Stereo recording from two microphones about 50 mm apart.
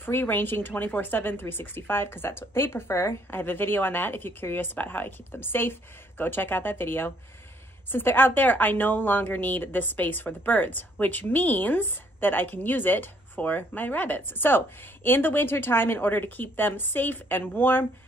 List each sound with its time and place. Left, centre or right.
0.0 s speech: left
3.3 s a woman's voice: left